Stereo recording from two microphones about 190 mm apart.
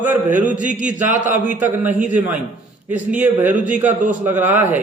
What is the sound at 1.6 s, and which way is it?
Speech, 10° right (ahead or behind).